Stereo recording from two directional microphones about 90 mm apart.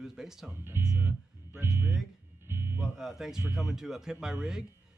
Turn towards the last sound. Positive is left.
turn(degrees=-5)  # may be behind; listen again after turning